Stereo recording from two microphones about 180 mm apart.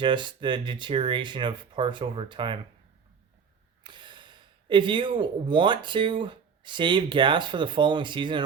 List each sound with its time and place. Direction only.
0.0 s speech: 25° right (ahead or behind)
3.8 s speech: 25° right (ahead or behind)